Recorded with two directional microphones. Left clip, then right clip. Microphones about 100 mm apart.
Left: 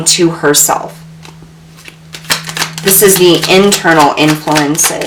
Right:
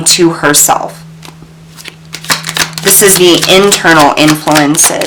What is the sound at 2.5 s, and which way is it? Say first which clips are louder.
Speech: right 1 dB; 40° right (ahead or behind).